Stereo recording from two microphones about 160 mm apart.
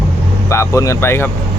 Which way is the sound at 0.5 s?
20° left (ahead or behind).